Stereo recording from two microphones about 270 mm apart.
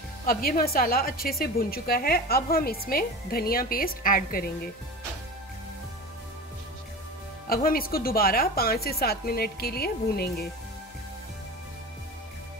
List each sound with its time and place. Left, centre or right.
0.3 s a woman's voice: left
7.4 s a woman's voice: left